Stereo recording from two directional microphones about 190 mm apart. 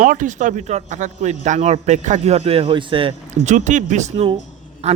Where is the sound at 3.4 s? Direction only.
40° right (ahead or behind).